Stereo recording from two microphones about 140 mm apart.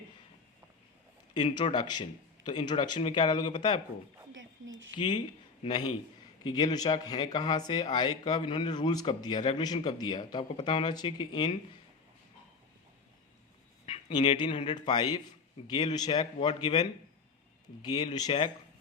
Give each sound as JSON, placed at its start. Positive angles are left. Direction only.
{"t": 1.3, "sound": "speech", "side_deg": 35}
{"t": 14.1, "sound": "speech", "side_deg": 30}